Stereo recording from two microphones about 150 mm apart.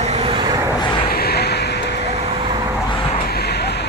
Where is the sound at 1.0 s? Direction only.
90° left.